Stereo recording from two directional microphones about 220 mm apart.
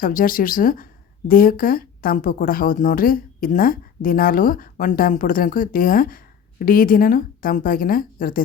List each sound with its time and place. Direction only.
0.0 s a woman's voice: 40° left (ahead or behind)